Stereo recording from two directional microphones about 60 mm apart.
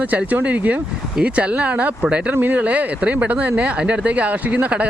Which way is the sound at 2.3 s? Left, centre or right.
Right.